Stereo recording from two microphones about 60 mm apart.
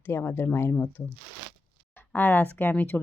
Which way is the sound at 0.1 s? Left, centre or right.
Left.